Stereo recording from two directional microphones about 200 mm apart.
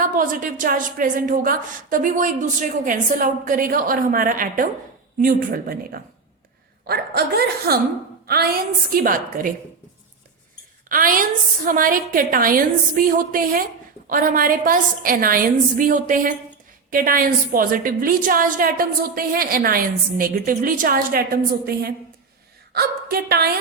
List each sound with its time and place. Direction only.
0.0 s a woman's voice: 40° right (ahead or behind)
8.9 s a woman's voice: 45° right (ahead or behind)
10.8 s a woman's voice: 45° right (ahead or behind)
22.7 s a woman's voice: 50° right (ahead or behind)